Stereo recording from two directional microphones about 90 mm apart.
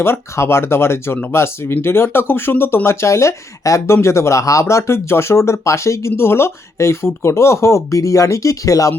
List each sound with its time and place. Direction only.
0.0 s speech: 25° left (ahead or behind)